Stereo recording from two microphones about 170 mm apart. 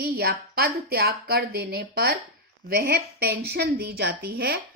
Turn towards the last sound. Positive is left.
turn(degrees=-65)  # may be behind; listen again after turning